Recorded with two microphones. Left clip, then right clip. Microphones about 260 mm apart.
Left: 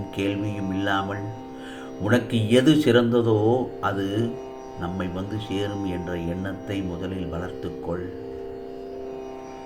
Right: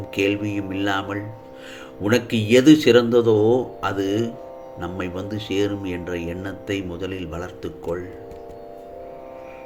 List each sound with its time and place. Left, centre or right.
0.2 s speech: right